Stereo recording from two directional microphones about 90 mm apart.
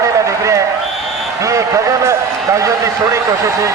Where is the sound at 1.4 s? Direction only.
35° right (ahead or behind).